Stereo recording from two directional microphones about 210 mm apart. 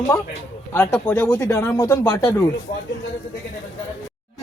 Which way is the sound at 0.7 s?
10° left (ahead or behind).